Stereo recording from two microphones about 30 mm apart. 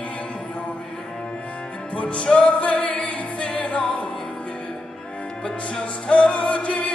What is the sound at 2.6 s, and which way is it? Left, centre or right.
Music, left.